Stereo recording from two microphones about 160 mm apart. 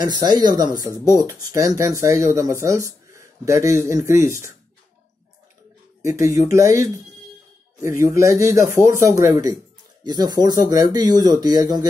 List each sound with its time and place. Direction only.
0.0 s speech: 25° right (ahead or behind)
6.2 s speech: 20° right (ahead or behind)
8.1 s speech: 20° right (ahead or behind)